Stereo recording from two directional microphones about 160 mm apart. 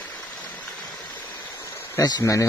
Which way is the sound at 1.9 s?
20° left (ahead or behind).